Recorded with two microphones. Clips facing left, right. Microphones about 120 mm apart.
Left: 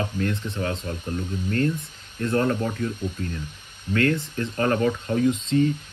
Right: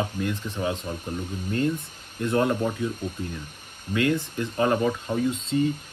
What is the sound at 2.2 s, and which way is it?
Speech, 15° right (ahead or behind).